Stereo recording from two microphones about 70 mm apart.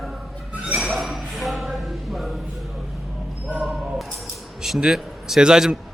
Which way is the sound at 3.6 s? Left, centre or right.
Centre.